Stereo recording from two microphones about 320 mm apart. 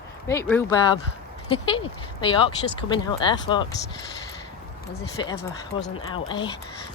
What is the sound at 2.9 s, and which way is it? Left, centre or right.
Speech, centre.